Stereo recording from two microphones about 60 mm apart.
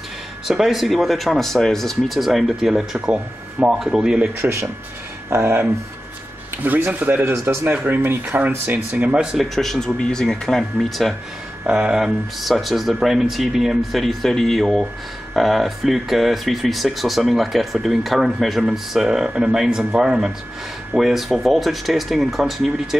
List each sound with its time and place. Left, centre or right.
0.5 s speech: centre
3.1 s speech: centre
4.4 s speech: right
6.9 s speech: right
8.9 s speech: centre
9.4 s speech: centre
11.6 s speech: centre